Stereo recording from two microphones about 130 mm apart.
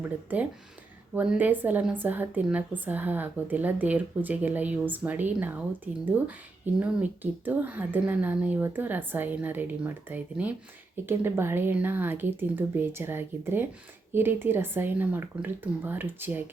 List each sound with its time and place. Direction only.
0.0 s a woman's voice: 10° right (ahead or behind)